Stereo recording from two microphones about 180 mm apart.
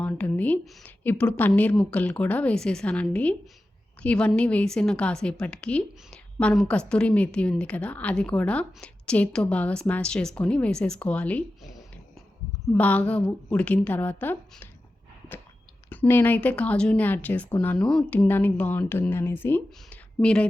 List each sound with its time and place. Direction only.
0.0 s a woman's voice: 10° left (ahead or behind)
12.6 s a woman's voice: 10° left (ahead or behind)
15.9 s a woman's voice: 10° left (ahead or behind)